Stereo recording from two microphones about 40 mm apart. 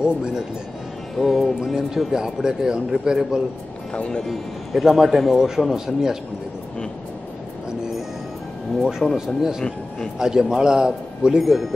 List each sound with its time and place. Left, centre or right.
0.0 s speech: centre
1.1 s speech: centre
3.9 s speech: left
4.2 s speech: centre
9.1 s speech: centre
11.2 s speech: centre